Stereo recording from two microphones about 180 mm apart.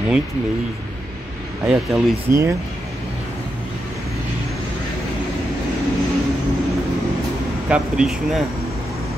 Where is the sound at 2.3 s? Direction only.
15° right (ahead or behind).